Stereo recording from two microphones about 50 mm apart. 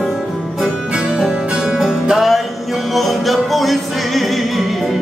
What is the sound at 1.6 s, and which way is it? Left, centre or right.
Music, centre.